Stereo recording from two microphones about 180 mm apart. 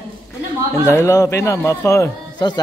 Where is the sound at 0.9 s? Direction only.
15° left (ahead or behind).